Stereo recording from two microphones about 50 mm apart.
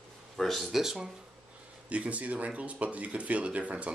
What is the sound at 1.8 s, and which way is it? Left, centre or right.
Speech, right.